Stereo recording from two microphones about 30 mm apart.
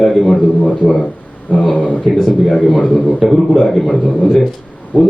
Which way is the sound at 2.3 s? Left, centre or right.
Centre.